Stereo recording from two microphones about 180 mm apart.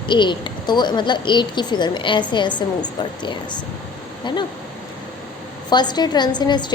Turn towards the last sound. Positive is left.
turn(degrees=25)  # may be behind; listen again after turning